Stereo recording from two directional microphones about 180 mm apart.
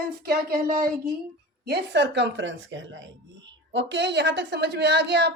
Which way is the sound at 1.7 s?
70° right (ahead or behind).